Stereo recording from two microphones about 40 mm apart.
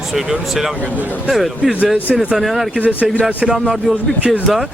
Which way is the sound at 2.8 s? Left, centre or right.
Right.